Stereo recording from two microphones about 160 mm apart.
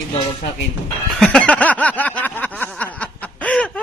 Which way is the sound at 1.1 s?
Centre (ahead or behind).